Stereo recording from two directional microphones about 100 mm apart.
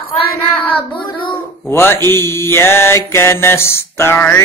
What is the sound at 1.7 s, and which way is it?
Music, 25° left (ahead or behind).